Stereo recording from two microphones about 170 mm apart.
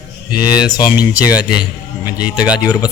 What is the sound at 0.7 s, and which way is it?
Speech, 25° left (ahead or behind).